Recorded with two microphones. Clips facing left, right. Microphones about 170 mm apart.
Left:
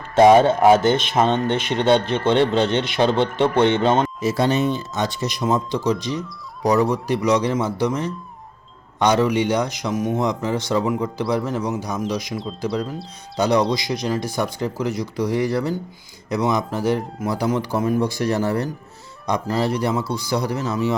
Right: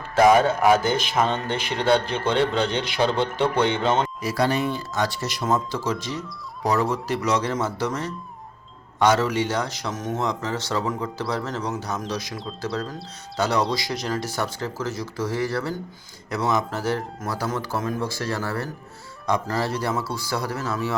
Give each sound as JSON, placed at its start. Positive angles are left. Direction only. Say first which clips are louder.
{"t": 0.2, "sound": "speech", "louder": "left 4 dB", "side_deg": 25}